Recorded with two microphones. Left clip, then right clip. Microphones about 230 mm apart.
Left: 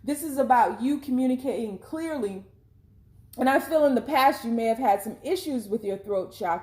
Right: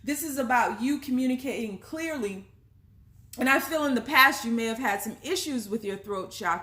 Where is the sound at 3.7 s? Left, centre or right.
Right.